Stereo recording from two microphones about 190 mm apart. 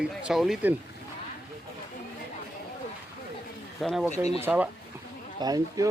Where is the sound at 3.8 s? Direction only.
Centre (ahead or behind).